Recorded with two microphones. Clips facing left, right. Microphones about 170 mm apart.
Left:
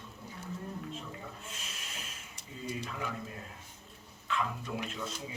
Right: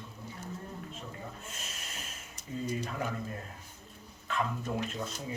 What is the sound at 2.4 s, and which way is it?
Speech, 45° right (ahead or behind).